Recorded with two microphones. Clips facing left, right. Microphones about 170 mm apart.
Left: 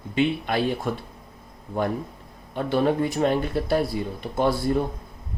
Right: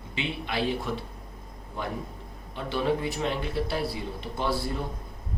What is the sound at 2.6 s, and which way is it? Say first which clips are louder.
Speech: left 6 dB; 50° left (ahead or behind).